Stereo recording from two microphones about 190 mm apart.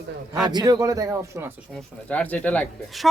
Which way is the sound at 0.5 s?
20° right (ahead or behind).